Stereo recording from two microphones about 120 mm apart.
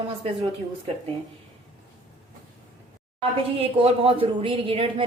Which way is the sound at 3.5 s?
55° right (ahead or behind).